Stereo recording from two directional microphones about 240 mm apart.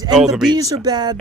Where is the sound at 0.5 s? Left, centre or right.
Centre.